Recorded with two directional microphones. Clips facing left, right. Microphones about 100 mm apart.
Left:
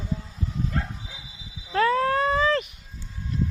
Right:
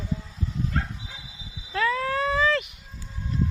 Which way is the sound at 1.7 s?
40° left (ahead or behind).